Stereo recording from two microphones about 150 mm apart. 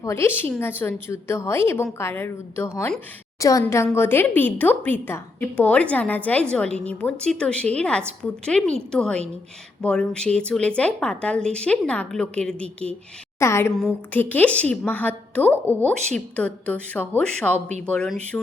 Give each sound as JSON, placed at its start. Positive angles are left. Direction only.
{"t": 0.0, "sound": "a woman's voice", "side_deg": 15}
{"t": 13.4, "sound": "a woman's voice", "side_deg": 20}